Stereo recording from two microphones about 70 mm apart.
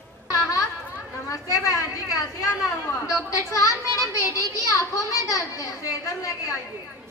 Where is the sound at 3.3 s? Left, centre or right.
Left.